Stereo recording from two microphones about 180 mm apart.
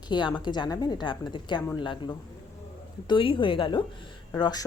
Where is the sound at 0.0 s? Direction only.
25° left (ahead or behind).